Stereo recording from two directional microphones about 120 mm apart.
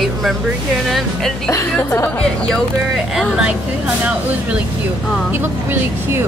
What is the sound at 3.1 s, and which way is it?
Speech, 5° right (ahead or behind).